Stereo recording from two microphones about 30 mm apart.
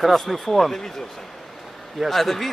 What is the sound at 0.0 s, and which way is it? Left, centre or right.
Speech, centre.